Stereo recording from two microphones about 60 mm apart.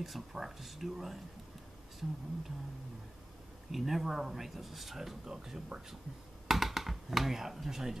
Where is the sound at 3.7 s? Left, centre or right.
Centre.